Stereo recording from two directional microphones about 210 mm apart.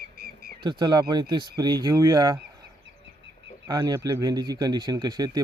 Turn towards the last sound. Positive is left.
turn(degrees=-20)  # may be behind; listen again after turning